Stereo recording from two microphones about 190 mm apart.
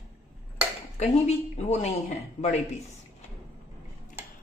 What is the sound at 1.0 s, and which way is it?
Speech, 35° left (ahead or behind).